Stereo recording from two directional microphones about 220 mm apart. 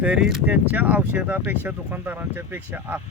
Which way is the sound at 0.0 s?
5° right (ahead or behind).